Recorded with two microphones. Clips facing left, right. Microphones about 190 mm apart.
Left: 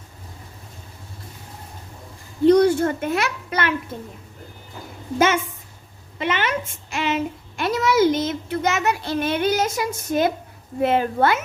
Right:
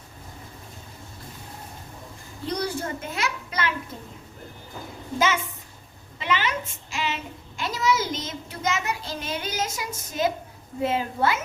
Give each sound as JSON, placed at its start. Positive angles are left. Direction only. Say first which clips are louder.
{"t": 2.5, "sound": "a child's voice", "louder": "left 13 dB", "side_deg": 65}
{"t": 6.1, "sound": "a child's voice", "louder": "left 3 dB", "side_deg": 55}